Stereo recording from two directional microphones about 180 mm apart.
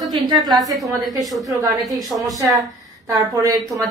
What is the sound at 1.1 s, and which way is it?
Speech, centre (ahead or behind).